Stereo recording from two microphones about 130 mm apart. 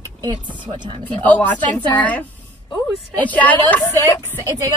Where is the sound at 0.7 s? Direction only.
35° right (ahead or behind).